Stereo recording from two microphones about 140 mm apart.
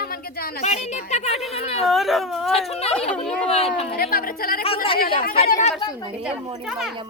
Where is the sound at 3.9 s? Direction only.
90° left.